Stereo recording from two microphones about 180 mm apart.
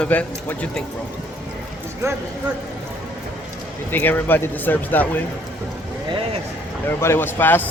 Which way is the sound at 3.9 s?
10° left (ahead or behind).